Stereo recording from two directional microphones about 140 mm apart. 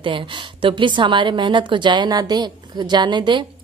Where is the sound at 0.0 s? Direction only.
35° right (ahead or behind).